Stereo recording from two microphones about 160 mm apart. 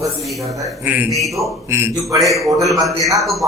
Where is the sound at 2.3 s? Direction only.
Centre (ahead or behind).